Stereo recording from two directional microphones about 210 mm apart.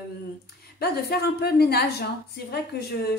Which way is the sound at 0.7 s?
50° left (ahead or behind).